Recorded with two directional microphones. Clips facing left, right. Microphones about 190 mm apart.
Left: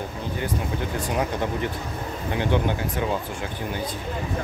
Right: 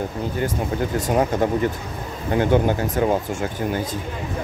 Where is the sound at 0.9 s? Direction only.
45° right (ahead or behind).